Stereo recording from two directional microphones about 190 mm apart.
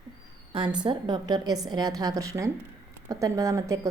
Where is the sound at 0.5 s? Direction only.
25° right (ahead or behind).